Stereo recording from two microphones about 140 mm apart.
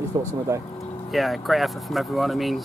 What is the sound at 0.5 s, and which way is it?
Speech, 20° right (ahead or behind).